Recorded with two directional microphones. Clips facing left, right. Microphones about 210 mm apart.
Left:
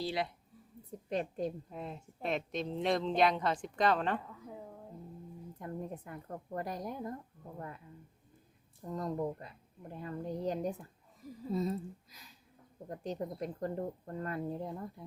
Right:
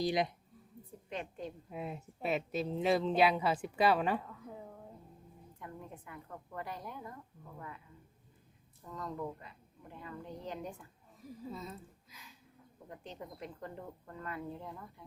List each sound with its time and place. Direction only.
0.0 s speech: 15° right (ahead or behind)
1.1 s a woman's voice: 40° left (ahead or behind)
1.7 s speech: 5° right (ahead or behind)
5.5 s a woman's voice: 40° left (ahead or behind)
8.8 s a woman's voice: 35° left (ahead or behind)